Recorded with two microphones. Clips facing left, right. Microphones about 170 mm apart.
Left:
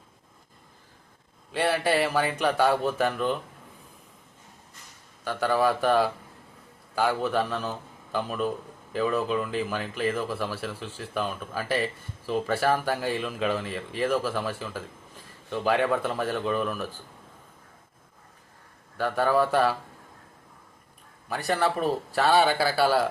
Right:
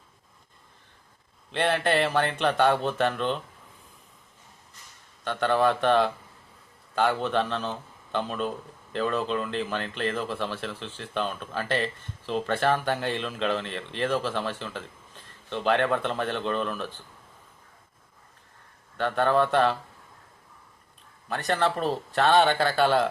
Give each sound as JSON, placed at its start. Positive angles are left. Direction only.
{"t": 1.5, "sound": "a man's voice", "side_deg": 5}
{"t": 5.2, "sound": "a man's voice", "side_deg": 5}
{"t": 18.9, "sound": "a man's voice", "side_deg": 5}
{"t": 21.2, "sound": "a man's voice", "side_deg": 10}